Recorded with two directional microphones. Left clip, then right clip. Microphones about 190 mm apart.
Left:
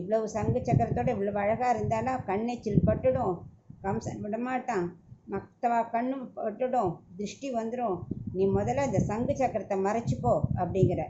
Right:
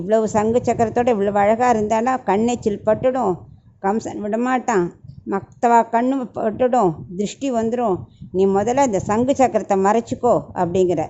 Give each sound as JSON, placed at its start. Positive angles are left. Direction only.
{"t": 0.1, "sound": "a woman's voice", "side_deg": -60}